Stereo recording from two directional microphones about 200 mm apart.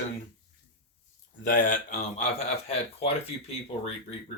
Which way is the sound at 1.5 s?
40° left (ahead or behind).